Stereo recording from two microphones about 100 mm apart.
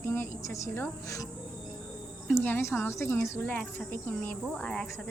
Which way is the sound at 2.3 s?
20° left (ahead or behind).